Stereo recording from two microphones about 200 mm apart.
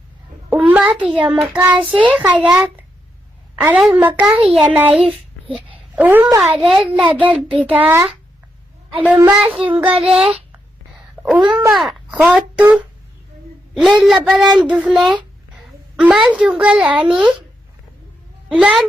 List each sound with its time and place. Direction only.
0.5 s a sound: 5° right (ahead or behind)
0.9 s a woman's voice: 5° right (ahead or behind)
9.2 s a woman's voice: 5° right (ahead or behind)
11.4 s speech: 20° right (ahead or behind)
11.7 s a child's voice: centre (ahead or behind)
18.4 s a child's voice: 5° right (ahead or behind)